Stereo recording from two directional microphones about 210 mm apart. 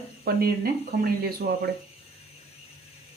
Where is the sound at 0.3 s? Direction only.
45° right (ahead or behind).